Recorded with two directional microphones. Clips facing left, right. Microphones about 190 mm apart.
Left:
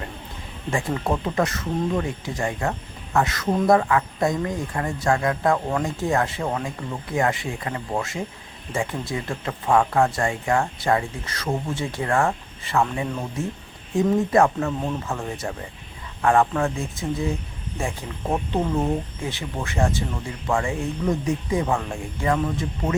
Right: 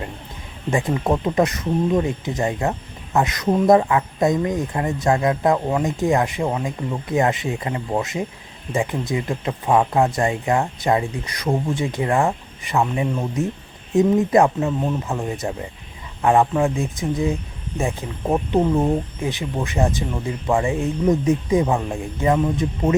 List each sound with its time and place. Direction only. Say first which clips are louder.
0.7 s speech: right 4 dB; 20° right (ahead or behind)